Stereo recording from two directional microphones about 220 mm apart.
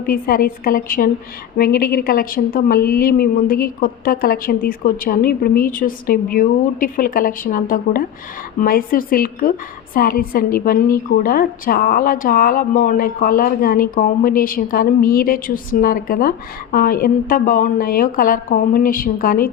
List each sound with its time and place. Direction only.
0.0 s a woman's voice: 40° left (ahead or behind)